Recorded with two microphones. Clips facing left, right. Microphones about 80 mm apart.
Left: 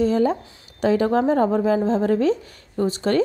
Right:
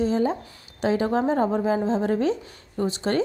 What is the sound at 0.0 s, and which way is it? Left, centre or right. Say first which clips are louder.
Speech: left 4 dB; left.